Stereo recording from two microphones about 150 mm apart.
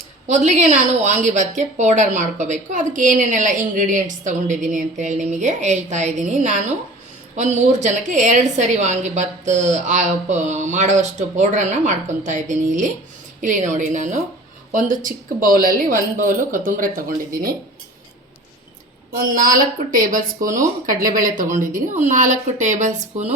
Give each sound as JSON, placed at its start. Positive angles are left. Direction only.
{"t": 0.3, "sound": "a woman's voice", "side_deg": -50}
{"t": 19.1, "sound": "a woman's voice", "side_deg": -70}